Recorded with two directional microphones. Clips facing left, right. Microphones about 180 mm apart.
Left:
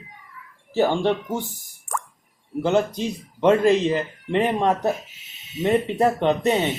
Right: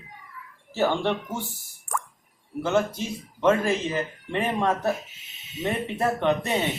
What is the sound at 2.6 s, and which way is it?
Speech, 15° left (ahead or behind).